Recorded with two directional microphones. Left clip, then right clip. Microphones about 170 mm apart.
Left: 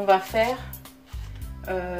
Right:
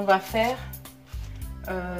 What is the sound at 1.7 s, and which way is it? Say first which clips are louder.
Speech: left 3 dB; 20° left (ahead or behind).